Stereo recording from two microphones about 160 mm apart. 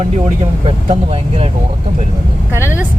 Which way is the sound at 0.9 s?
40° right (ahead or behind).